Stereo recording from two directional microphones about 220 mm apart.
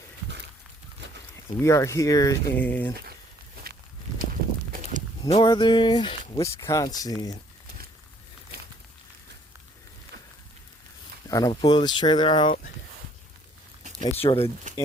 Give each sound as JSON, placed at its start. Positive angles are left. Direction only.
{"t": 1.5, "sound": "speech", "side_deg": 15}
{"t": 4.7, "sound": "walk", "side_deg": -35}
{"t": 5.3, "sound": "speech", "side_deg": 20}
{"t": 11.3, "sound": "speech", "side_deg": 15}
{"t": 14.0, "sound": "speech", "side_deg": 25}